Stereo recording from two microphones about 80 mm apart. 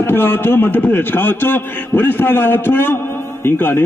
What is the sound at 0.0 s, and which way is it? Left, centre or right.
A man's voice, left.